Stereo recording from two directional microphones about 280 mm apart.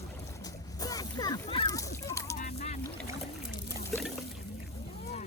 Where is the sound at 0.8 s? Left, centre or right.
Centre.